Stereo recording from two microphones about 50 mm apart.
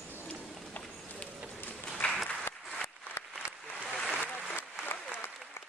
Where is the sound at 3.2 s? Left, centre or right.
Left.